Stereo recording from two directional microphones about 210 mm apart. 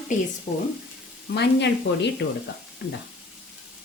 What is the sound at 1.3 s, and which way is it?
Speech, 55° left (ahead or behind).